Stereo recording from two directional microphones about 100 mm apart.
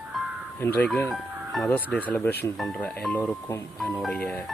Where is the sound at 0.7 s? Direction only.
10° left (ahead or behind).